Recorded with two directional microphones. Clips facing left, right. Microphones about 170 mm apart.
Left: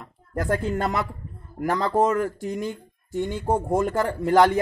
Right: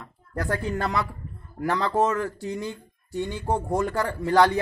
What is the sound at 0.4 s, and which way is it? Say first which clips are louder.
A man's voice: left 3 dB; 20° left (ahead or behind).